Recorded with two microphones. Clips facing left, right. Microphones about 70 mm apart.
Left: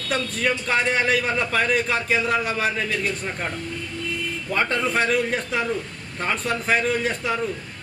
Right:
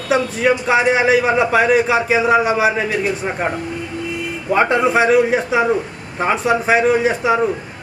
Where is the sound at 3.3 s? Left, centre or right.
Right.